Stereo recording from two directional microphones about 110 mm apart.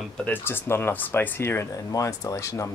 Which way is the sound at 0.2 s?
20° left (ahead or behind).